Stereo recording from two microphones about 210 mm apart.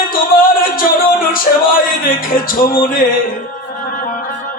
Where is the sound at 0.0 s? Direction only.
40° left (ahead or behind).